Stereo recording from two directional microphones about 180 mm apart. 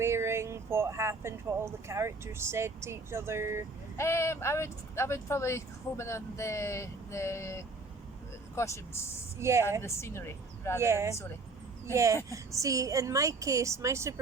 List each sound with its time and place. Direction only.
0.0 s speech: 15° right (ahead or behind)
3.9 s speech: 15° left (ahead or behind)
9.4 s speech: 15° right (ahead or behind)
9.8 s speech: 15° left (ahead or behind)
10.8 s speech: 15° right (ahead or behind)
11.1 s speech: 15° left (ahead or behind)
11.9 s speech: 15° right (ahead or behind)